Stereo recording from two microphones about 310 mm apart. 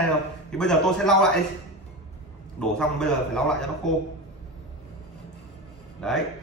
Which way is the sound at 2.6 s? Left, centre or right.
Centre.